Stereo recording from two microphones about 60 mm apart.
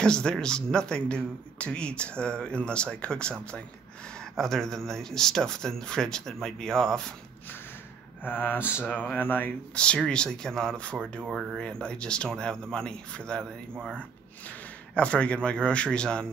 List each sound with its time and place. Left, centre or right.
0.0 s speech: centre
8.2 s speech: left
8.5 s mantra: centre
8.8 s speech: left
10.0 s speech: centre